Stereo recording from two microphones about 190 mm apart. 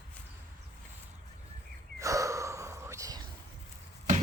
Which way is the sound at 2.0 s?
15° right (ahead or behind).